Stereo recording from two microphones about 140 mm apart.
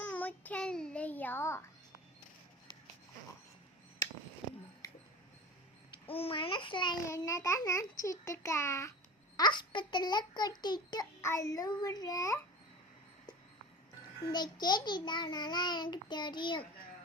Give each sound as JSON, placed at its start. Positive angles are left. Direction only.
{"t": 0.0, "sound": "child singing", "side_deg": 10}
{"t": 4.8, "sound": "a sound", "side_deg": 25}
{"t": 5.9, "sound": "babbling", "side_deg": 40}
{"t": 7.0, "sound": "a child's voice", "side_deg": 20}
{"t": 9.4, "sound": "a child's voice", "side_deg": 35}
{"t": 14.3, "sound": "a child's voice", "side_deg": 30}